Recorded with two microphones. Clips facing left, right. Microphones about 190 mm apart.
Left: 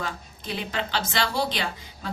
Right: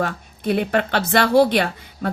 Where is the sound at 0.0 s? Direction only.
60° right (ahead or behind).